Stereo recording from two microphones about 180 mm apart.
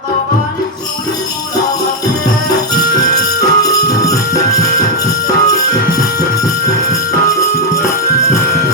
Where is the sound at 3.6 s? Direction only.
20° left (ahead or behind).